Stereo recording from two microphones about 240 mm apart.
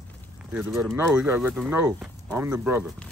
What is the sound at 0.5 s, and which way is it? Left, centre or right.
Speech, centre.